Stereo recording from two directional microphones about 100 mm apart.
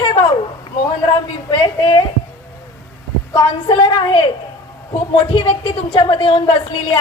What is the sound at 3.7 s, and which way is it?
Speech, 55° left (ahead or behind).